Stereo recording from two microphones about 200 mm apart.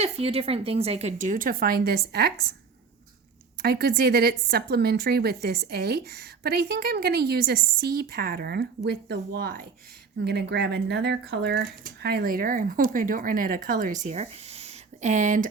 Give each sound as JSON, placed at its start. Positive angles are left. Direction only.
{"t": 0.0, "sound": "speech", "side_deg": -30}
{"t": 3.6, "sound": "a woman's voice", "side_deg": -50}